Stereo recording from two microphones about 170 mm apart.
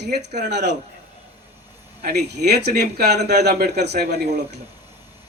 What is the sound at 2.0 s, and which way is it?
Speech, 65° right (ahead or behind).